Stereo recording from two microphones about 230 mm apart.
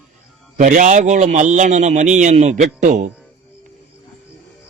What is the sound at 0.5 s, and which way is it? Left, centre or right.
A man's voice, right.